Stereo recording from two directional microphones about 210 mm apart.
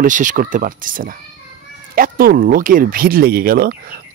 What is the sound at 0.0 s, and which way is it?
A man's voice, 35° right (ahead or behind).